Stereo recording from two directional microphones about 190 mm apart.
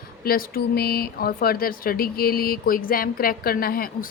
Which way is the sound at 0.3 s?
50° left (ahead or behind).